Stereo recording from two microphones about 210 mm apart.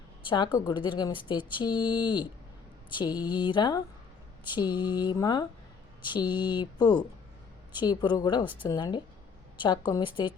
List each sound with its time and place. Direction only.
0.3 s a woman's voice: 20° left (ahead or behind)